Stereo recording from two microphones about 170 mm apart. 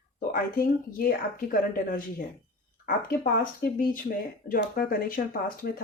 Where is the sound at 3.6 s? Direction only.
65° left (ahead or behind).